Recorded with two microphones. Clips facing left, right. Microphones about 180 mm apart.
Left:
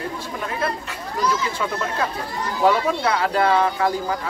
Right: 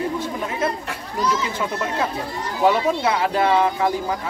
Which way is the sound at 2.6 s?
20° right (ahead or behind).